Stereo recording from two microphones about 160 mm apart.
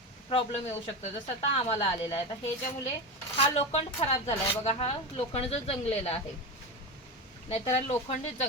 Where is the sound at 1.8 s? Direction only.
35° left (ahead or behind).